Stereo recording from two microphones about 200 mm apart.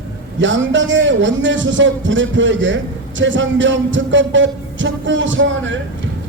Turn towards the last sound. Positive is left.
turn(degrees=-70)  # may be behind; listen again after turning